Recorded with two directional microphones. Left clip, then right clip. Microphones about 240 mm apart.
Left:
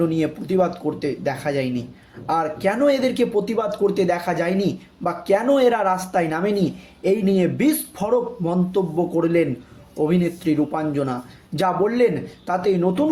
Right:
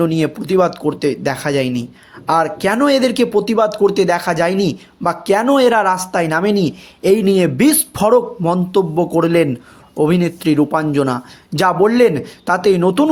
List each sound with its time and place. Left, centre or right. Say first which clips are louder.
0.0 s speech: right 5 dB; right